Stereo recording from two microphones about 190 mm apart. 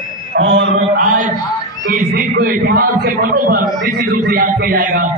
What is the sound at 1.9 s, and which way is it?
A man's voice, 50° right (ahead or behind).